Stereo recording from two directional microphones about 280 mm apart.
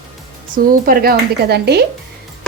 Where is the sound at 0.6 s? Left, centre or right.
Right.